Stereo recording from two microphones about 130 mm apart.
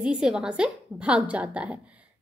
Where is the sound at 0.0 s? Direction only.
5° right (ahead or behind).